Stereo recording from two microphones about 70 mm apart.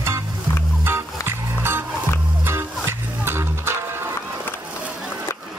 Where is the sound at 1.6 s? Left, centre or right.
Right.